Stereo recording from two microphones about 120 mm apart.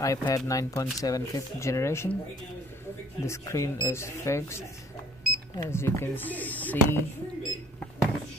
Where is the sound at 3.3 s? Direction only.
25° left (ahead or behind).